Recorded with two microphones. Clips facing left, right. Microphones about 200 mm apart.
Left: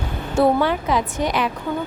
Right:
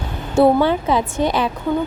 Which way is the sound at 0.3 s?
30° right (ahead or behind).